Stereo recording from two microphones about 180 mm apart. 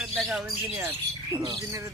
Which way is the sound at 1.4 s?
20° right (ahead or behind).